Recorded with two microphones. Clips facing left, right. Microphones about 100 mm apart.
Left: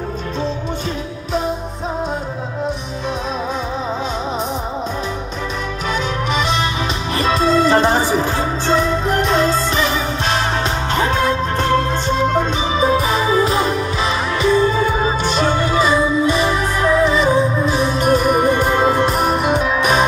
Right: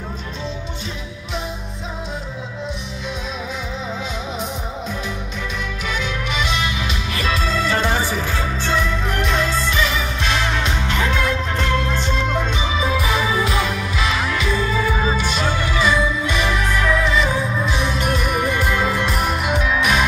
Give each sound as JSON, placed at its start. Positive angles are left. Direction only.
{"t": 5.9, "sound": "music", "side_deg": 40}
{"t": 15.1, "sound": "music", "side_deg": 45}